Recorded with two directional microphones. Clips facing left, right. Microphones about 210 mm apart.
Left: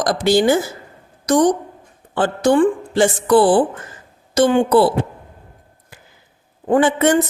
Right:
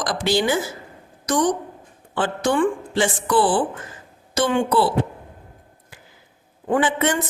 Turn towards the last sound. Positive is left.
turn(degrees=45)  # may be behind; listen again after turning